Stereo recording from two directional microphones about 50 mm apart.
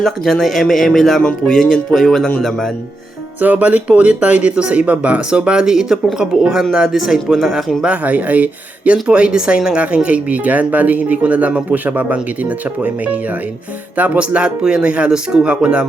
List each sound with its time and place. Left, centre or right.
0.0 s speech: centre
1.2 s speech: centre
3.4 s speech: right; by 7.3 s centre
8.0 s speech: right
9.0 s speech: right
14.2 s speech: right